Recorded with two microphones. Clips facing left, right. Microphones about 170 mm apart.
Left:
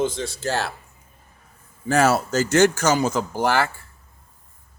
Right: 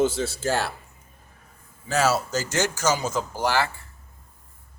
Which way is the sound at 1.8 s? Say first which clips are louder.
Left 4 dB; 55° left (ahead or behind).